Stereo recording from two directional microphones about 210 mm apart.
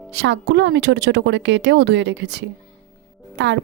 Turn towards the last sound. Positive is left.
turn(degrees=-55)  # may be behind; listen again after turning